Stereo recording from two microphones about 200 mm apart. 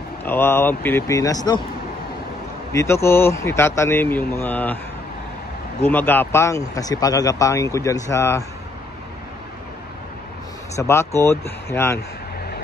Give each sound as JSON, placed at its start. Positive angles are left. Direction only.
{"t": 0.2, "sound": "speech", "side_deg": 10}
{"t": 2.7, "sound": "speech", "side_deg": 15}
{"t": 5.8, "sound": "speech", "side_deg": 10}
{"t": 10.8, "sound": "speech", "side_deg": 15}